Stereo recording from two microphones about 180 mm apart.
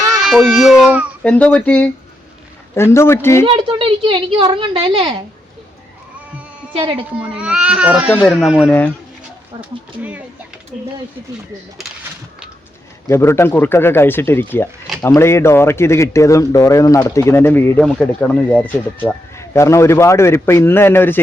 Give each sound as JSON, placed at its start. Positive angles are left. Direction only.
{"t": 0.1, "sound": "speech", "side_deg": 0}
{"t": 1.2, "sound": "speech", "side_deg": 5}
{"t": 3.4, "sound": "a woman's voice", "side_deg": -30}
{"t": 6.7, "sound": "a woman's voice", "side_deg": -25}
{"t": 7.2, "sound": "speech", "side_deg": -5}
{"t": 13.1, "sound": "speech", "side_deg": 15}